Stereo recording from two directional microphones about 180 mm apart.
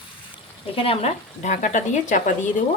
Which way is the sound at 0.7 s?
30° left (ahead or behind).